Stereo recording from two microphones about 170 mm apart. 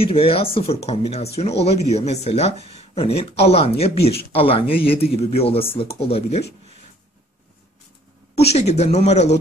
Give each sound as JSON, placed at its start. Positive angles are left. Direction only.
{"t": 0.0, "sound": "speech", "side_deg": 35}
{"t": 8.4, "sound": "speech", "side_deg": 40}